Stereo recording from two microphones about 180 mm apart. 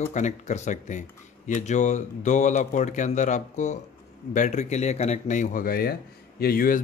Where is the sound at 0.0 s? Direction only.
40° left (ahead or behind).